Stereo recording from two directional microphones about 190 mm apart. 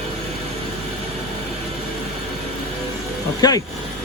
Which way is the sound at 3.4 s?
20° left (ahead or behind).